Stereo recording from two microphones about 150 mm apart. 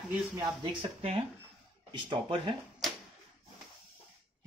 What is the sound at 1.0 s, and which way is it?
Speech, 40° right (ahead or behind).